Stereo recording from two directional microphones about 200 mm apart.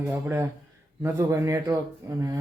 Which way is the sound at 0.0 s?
10° right (ahead or behind).